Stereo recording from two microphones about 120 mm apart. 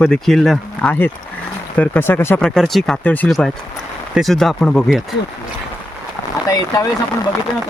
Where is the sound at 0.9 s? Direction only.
15° left (ahead or behind).